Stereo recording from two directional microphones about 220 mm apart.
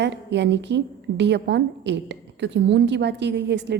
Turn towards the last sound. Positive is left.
turn(degrees=-50)  # may be behind; listen again after turning